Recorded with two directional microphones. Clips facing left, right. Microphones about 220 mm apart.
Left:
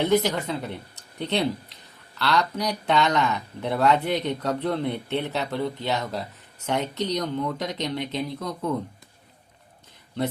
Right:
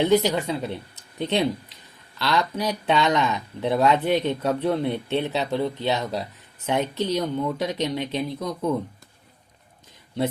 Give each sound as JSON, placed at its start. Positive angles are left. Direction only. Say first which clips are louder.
{"t": 0.0, "sound": "speech", "louder": "right 2 dB", "side_deg": -15}